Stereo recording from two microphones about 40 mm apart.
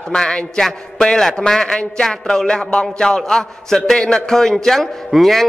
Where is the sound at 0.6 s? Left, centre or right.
Centre.